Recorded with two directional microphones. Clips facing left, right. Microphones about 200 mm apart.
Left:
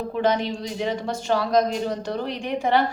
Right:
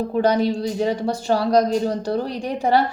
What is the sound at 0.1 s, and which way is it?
Speech, 35° right (ahead or behind).